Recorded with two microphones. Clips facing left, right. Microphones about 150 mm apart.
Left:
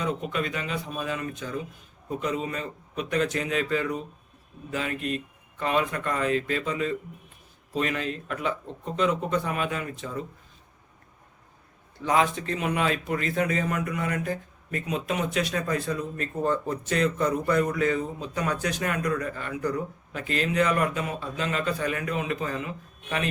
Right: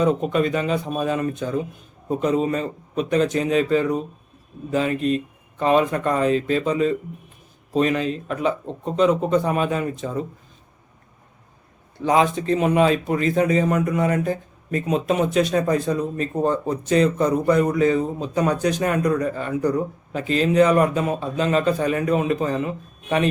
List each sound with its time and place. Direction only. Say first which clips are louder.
0.0 s a man's voice: right 9 dB; 40° right (ahead or behind)
2.0 s a man's voice: right 9 dB; 40° right (ahead or behind)
3.1 s speech: right 7 dB; 25° right (ahead or behind)
8.6 s a man's voice: right 8 dB; 35° right (ahead or behind)
12.0 s a man's voice: right 6 dB; 25° right (ahead or behind)